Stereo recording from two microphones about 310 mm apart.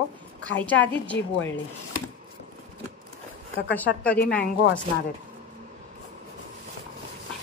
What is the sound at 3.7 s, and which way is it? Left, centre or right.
Speech, centre.